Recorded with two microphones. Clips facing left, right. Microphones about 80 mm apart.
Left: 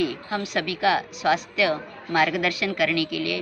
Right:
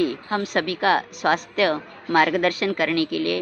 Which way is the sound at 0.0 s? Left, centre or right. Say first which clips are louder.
Right 3 dB; right.